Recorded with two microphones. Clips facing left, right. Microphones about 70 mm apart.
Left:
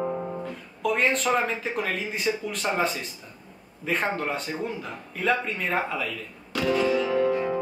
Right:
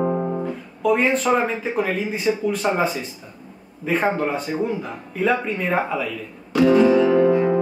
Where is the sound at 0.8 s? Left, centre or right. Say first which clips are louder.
Right 5 dB; centre.